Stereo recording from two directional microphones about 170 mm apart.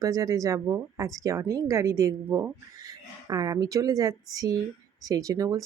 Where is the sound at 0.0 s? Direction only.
20° right (ahead or behind).